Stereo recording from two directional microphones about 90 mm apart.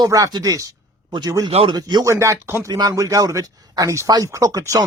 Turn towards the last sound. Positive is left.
turn(degrees=-40)  # may be behind; listen again after turning